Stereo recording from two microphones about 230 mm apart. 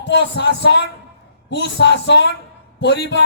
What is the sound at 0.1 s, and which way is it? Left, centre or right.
A man's voice, left.